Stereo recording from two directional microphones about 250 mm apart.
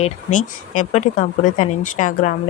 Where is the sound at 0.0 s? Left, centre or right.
Left.